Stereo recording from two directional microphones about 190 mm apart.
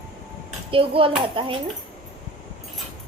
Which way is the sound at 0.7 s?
30° right (ahead or behind).